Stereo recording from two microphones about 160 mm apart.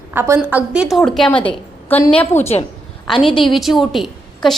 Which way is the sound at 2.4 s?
40° left (ahead or behind).